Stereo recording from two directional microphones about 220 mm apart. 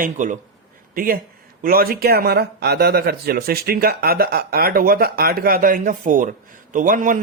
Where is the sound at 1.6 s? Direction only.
40° right (ahead or behind).